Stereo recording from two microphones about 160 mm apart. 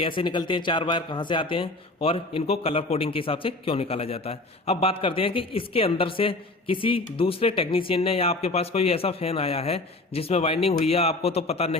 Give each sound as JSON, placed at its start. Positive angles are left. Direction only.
{"t": 0.0, "sound": "a man's voice", "side_deg": 30}